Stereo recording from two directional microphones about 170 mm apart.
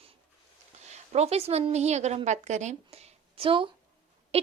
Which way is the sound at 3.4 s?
30° right (ahead or behind).